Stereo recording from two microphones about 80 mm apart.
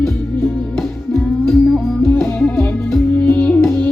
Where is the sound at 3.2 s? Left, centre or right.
Left.